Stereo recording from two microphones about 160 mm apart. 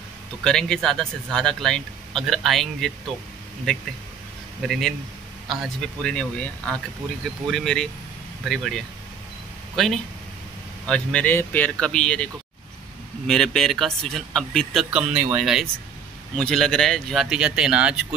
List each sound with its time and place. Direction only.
0.4 s speech: 5° left (ahead or behind)
13.3 s speech: 5° left (ahead or behind)